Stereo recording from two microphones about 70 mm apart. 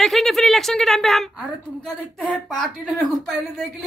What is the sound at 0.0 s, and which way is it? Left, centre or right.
Speech, centre.